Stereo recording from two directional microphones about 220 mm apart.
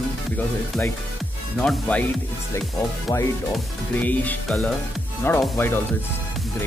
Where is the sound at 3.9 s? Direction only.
5° left (ahead or behind).